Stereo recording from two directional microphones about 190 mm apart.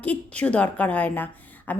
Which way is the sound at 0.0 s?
10° left (ahead or behind).